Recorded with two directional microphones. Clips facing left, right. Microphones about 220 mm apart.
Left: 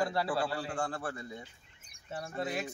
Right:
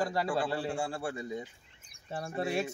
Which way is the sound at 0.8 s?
10° right (ahead or behind).